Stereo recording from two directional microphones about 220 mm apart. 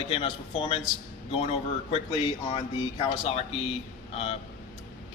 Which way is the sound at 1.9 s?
25° left (ahead or behind).